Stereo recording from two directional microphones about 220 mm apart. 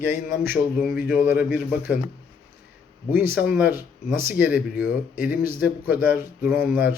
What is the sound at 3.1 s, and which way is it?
Speech, 10° right (ahead or behind).